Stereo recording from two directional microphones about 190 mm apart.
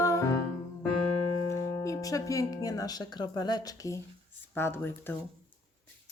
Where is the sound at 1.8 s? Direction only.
15° left (ahead or behind).